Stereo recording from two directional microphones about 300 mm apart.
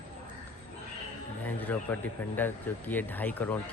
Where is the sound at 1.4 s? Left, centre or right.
Centre.